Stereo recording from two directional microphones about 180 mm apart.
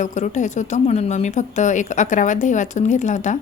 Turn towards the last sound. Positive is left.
turn(degrees=40)  # may be behind; listen again after turning